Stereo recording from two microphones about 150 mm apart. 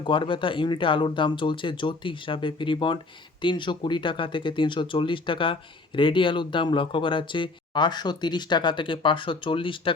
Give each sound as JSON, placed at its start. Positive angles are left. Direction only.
{"t": 0.0, "sound": "speech", "side_deg": 35}